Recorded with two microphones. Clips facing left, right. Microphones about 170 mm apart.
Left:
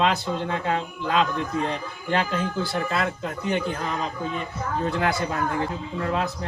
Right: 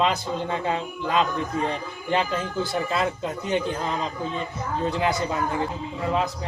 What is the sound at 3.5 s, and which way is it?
Speech, 20° right (ahead or behind).